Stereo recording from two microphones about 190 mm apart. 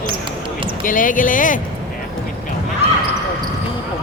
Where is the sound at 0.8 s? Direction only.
45° left (ahead or behind).